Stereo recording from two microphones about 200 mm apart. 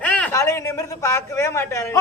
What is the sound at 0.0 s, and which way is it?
A man's voice, 5° left (ahead or behind).